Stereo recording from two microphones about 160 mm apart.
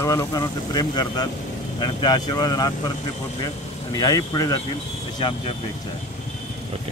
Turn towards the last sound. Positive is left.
turn(degrees=30)  # may be behind; listen again after turning